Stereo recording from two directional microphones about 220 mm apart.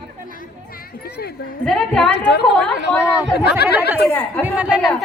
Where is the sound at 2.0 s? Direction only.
50° left (ahead or behind).